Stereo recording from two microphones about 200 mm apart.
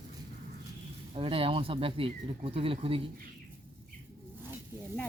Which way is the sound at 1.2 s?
30° right (ahead or behind).